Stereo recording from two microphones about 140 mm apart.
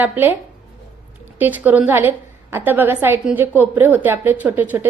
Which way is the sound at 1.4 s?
10° right (ahead or behind).